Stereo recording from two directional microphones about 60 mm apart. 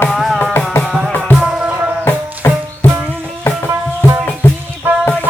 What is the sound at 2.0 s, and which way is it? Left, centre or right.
Music, left.